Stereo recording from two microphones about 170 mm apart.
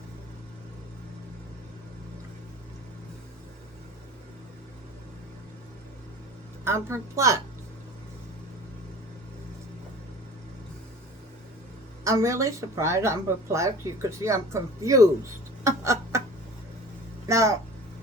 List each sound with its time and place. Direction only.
6.7 s speech: 15° right (ahead or behind)
12.0 s speech: 20° right (ahead or behind)
15.6 s a sound: 15° right (ahead or behind)
17.2 s speech: 20° right (ahead or behind)